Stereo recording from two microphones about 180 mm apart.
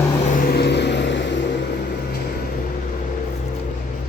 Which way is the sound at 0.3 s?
50° left (ahead or behind).